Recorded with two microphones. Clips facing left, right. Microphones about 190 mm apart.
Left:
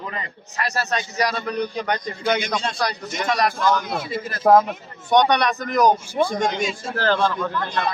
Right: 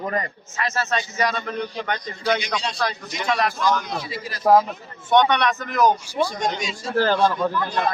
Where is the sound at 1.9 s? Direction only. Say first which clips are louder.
Right 1 dB; 50° left (ahead or behind).